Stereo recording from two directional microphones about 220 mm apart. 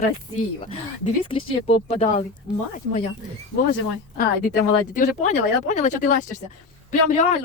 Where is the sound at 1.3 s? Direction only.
25° left (ahead or behind).